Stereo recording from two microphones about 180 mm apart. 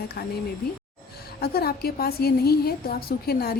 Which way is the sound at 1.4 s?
60° left (ahead or behind).